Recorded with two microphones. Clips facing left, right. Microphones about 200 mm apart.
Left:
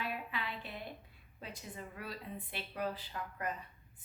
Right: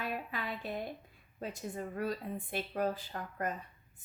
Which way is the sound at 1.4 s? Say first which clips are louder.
Right 8 dB; 45° right (ahead or behind).